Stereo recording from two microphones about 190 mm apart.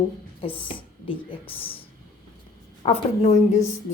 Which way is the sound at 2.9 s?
35° left (ahead or behind).